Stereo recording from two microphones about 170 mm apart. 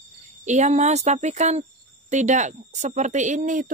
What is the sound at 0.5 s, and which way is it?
Speech, 45° right (ahead or behind).